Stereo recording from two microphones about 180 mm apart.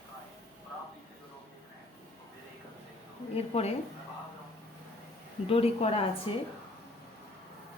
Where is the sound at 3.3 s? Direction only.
35° left (ahead or behind).